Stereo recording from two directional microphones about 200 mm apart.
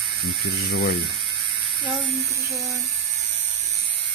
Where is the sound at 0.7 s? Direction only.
60° left (ahead or behind).